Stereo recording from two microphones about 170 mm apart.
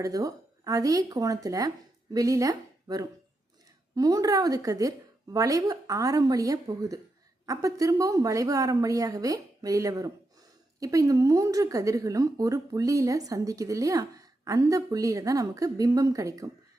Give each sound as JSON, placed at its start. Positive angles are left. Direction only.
{"t": 0.0, "sound": "a woman's voice", "side_deg": -20}